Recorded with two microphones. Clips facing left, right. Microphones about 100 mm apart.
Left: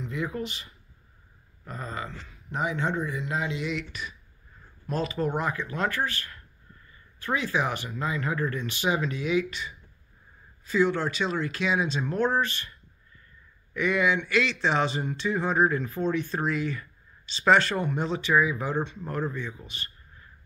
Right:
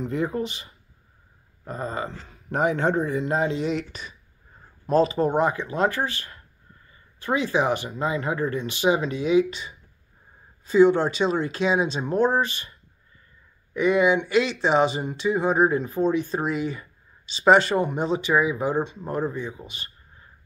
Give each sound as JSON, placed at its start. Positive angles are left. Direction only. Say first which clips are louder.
{"t": 0.0, "sound": "speech", "louder": "right 6 dB", "side_deg": -40}
{"t": 2.2, "sound": "speech", "louder": "right 8 dB", "side_deg": -50}
{"t": 13.7, "sound": "speech", "louder": "right 5 dB", "side_deg": -20}